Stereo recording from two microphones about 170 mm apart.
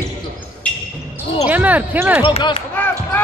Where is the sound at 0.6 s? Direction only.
5° left (ahead or behind).